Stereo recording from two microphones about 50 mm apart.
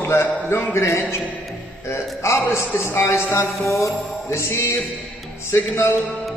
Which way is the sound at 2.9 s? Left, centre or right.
Left.